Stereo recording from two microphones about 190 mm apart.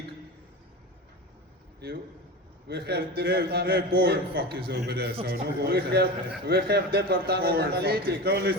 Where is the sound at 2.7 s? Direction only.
60° right (ahead or behind).